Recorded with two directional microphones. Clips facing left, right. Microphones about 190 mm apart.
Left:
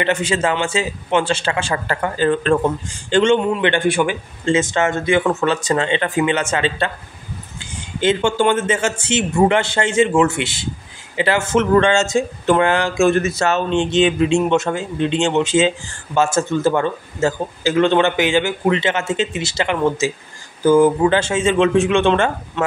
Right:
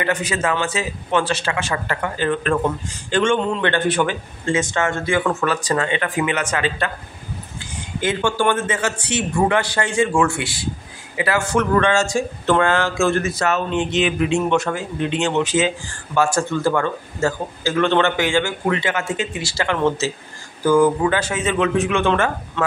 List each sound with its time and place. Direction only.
0.0 s speech: 25° left (ahead or behind)
3.3 s a man's voice: 10° left (ahead or behind)
4.5 s speech: 25° left (ahead or behind)
8.0 s speech: 25° left (ahead or behind)